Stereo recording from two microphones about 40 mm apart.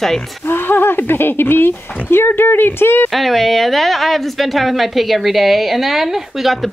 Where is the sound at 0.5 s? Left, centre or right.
Left.